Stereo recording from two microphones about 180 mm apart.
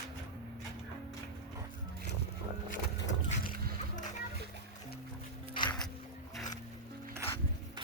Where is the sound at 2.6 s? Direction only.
45° left (ahead or behind).